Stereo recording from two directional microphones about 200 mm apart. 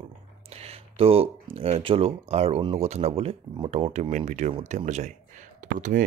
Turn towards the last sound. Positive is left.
turn(degrees=-45)  # may be behind; listen again after turning